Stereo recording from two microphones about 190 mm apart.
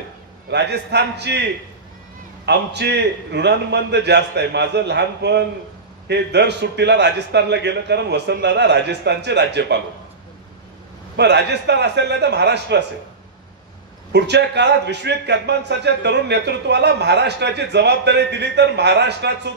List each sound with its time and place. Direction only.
0.5 s a man's voice: 65° right (ahead or behind)
11.1 s a man's voice: 60° right (ahead or behind)
14.1 s a man's voice: 65° right (ahead or behind)